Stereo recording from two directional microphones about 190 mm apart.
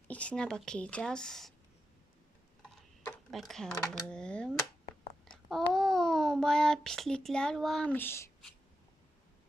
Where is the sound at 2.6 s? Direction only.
Centre (ahead or behind).